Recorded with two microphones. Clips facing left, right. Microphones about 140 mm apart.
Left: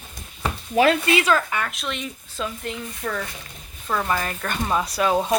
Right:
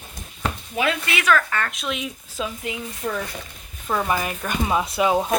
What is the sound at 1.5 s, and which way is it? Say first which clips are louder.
Speech: right 1 dB; 10° left (ahead or behind).